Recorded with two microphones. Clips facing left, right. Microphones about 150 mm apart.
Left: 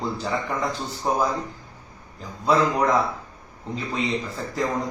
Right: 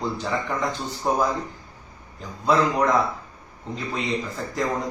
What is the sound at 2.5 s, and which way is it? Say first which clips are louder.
Speech: even; 5° left (ahead or behind).